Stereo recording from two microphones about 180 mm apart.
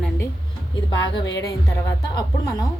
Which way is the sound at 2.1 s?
25° left (ahead or behind).